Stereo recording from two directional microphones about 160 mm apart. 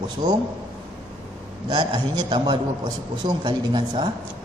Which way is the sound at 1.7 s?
25° right (ahead or behind).